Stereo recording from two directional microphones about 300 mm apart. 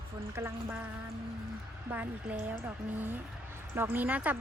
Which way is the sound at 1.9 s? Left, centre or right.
Centre.